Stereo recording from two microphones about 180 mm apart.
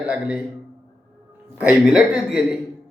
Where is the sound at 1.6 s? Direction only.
5° right (ahead or behind).